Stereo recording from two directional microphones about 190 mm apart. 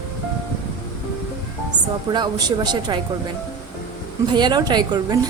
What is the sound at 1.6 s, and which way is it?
Speech, 20° right (ahead or behind).